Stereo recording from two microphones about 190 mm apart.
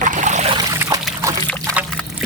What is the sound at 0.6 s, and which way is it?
Trickle, 20° right (ahead or behind).